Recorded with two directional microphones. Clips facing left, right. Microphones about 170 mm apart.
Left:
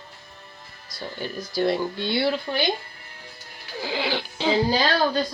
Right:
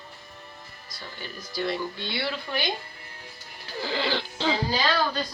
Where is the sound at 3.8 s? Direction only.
15° left (ahead or behind).